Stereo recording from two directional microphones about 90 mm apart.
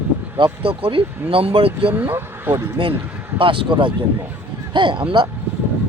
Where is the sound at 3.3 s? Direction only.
75° right (ahead or behind); by 5.3 s 60° right (ahead or behind).